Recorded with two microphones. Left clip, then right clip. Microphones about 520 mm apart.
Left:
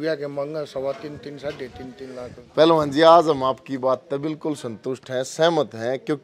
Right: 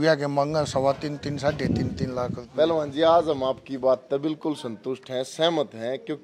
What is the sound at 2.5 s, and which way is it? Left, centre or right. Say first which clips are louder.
A man's voice: left 7 dB; left.